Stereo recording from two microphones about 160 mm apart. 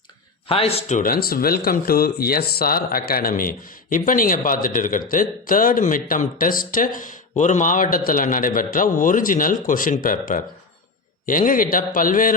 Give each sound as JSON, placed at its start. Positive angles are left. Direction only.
{"t": 0.4, "sound": "speech", "side_deg": 35}